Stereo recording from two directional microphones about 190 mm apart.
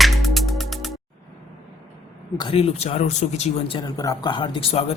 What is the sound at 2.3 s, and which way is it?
Speech, 25° left (ahead or behind).